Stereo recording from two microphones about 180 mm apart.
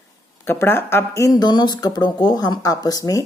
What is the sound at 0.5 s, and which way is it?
Speech, 15° left (ahead or behind).